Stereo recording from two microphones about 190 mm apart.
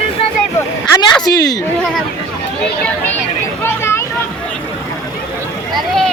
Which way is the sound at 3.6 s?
15° left (ahead or behind).